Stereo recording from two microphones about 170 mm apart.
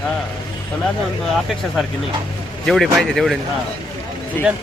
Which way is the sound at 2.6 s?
Centre (ahead or behind).